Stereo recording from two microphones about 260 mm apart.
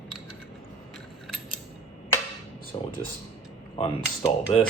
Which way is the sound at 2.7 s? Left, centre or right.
Centre.